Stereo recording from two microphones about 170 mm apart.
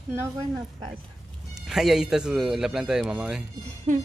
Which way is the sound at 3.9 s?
45° right (ahead or behind).